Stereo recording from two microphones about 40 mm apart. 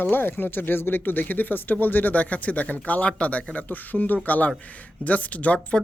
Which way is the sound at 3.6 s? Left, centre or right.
Left.